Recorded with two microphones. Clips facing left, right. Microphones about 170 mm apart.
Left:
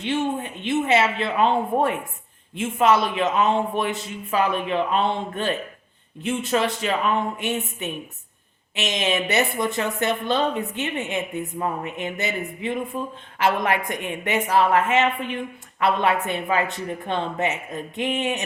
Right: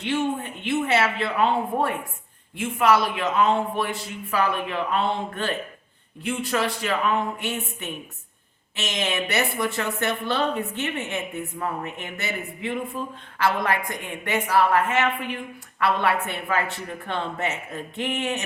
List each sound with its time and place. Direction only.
0.0 s a woman's voice: 20° left (ahead or behind)